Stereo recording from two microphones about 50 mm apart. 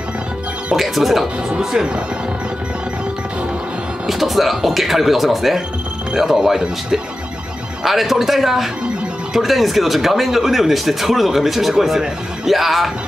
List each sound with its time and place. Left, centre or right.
0.7 s speech: centre
1.5 s speech: centre
4.1 s speech: centre